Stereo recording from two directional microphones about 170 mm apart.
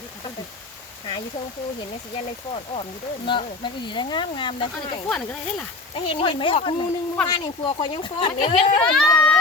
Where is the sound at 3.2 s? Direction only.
30° left (ahead or behind).